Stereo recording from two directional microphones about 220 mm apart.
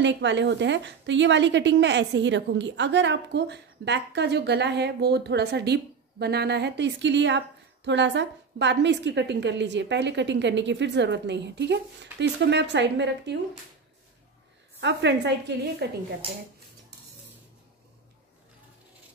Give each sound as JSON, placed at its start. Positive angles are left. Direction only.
{"t": 0.0, "sound": "a woman's voice", "side_deg": -55}
{"t": 14.8, "sound": "a woman's voice", "side_deg": -50}